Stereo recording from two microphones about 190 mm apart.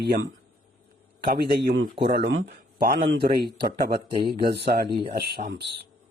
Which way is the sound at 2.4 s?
55° right (ahead or behind).